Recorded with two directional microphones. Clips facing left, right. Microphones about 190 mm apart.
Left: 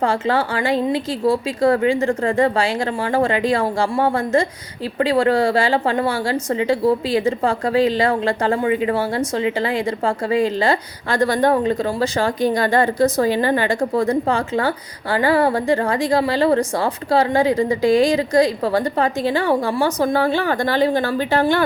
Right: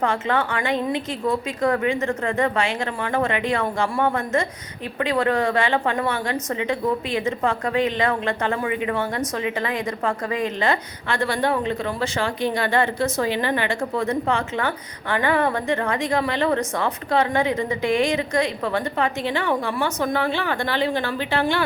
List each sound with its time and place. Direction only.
0.0 s a woman's voice: 30° left (ahead or behind)